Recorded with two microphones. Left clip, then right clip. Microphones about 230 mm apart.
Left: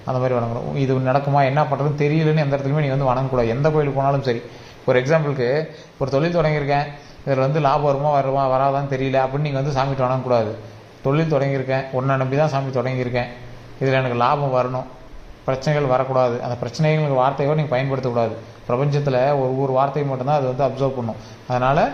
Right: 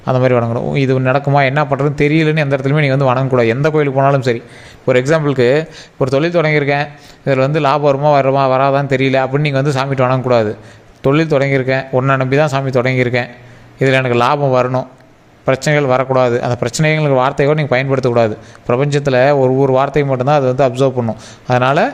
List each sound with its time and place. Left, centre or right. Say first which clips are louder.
0.1 s a man's voice: right 8 dB; right